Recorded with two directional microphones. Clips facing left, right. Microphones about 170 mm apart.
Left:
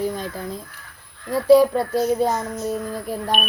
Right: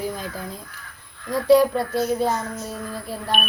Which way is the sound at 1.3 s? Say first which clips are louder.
Left 2 dB; 10° left (ahead or behind).